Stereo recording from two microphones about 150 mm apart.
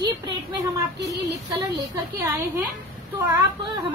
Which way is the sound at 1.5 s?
20° right (ahead or behind).